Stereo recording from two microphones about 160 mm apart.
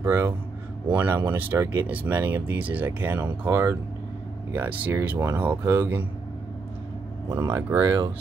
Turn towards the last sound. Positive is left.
turn(degrees=-15)  # may be behind; listen again after turning